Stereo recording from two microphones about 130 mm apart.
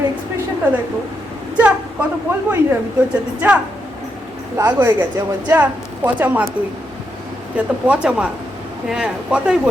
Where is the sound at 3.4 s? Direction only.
15° right (ahead or behind).